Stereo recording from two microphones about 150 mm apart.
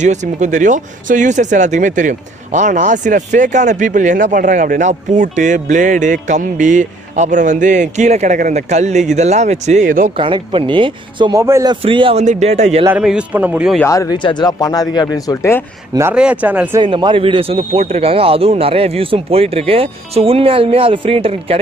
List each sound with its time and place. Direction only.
0.0 s speech: 55° right (ahead or behind)
10.1 s a man's voice: 35° right (ahead or behind)
11.3 s speech: 20° right (ahead or behind)
11.7 s a man's voice: 35° right (ahead or behind)
12.3 s speech: 50° right (ahead or behind)
13.0 s a man's voice: 10° right (ahead or behind)
13.8 s speech: 25° left (ahead or behind)
15.9 s a man's voice: 20° right (ahead or behind)
16.8 s a man's voice: 35° right (ahead or behind)